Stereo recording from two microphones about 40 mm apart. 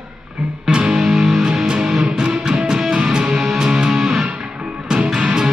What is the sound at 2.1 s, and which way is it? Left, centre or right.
Music, right.